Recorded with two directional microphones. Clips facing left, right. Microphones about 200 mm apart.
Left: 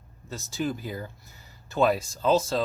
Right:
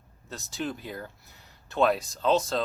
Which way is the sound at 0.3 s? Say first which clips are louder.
Left 4 dB; centre (ahead or behind).